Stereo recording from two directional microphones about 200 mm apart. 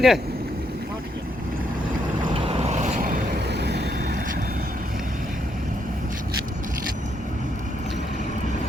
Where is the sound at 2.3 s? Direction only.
25° right (ahead or behind).